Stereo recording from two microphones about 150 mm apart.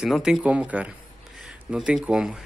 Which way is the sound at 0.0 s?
5° right (ahead or behind).